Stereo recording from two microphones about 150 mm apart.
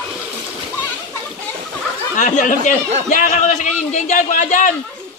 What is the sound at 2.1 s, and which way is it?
A man's voice, 55° left (ahead or behind).